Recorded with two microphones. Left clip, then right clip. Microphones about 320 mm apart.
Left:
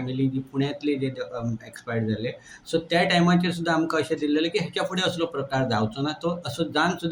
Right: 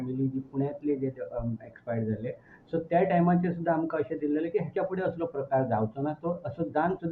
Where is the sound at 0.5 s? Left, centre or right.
Right.